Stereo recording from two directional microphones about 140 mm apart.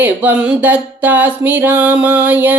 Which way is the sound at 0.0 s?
10° right (ahead or behind).